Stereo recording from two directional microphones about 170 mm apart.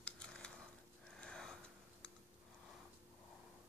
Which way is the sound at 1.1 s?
5° left (ahead or behind).